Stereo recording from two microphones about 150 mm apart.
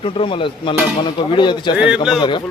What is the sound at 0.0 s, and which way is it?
Speech, 35° left (ahead or behind).